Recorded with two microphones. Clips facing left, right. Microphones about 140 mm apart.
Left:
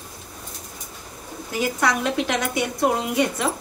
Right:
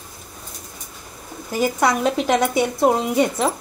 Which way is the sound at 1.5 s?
40° right (ahead or behind).